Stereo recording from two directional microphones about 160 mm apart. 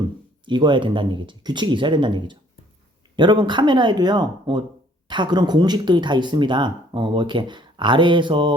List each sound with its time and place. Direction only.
0.4 s speech: 30° right (ahead or behind)